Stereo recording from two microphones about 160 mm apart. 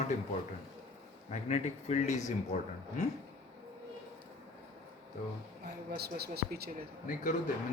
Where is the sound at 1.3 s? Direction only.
45° left (ahead or behind).